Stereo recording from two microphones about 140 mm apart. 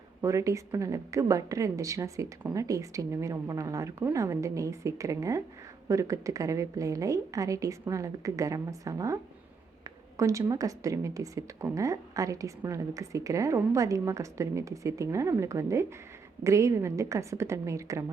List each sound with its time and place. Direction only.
0.2 s speech: 20° right (ahead or behind)